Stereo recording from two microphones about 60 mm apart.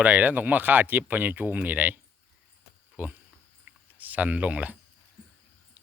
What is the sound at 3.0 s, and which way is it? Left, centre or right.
Speech, right.